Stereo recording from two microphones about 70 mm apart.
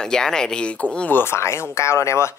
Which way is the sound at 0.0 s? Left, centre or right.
Centre.